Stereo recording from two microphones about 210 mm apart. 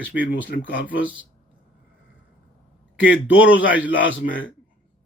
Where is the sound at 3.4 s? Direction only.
65° left (ahead or behind).